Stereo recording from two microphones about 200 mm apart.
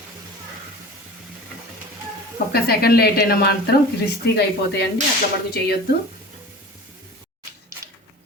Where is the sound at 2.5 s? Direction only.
50° left (ahead or behind).